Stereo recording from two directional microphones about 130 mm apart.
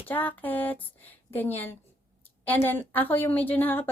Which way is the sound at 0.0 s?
15° left (ahead or behind).